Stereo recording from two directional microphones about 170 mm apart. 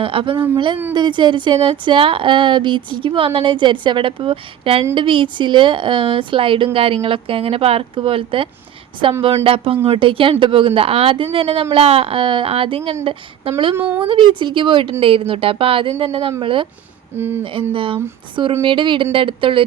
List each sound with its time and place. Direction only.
0.0 s a woman's voice: 30° right (ahead or behind)
13.7 s speech: 10° right (ahead or behind)
14.0 s a woman's voice: 30° right (ahead or behind)
17.2 s speech: 15° right (ahead or behind)
17.7 s a woman's voice: 30° right (ahead or behind)